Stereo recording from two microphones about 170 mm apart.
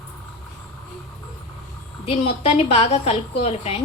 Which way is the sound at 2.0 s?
35° left (ahead or behind).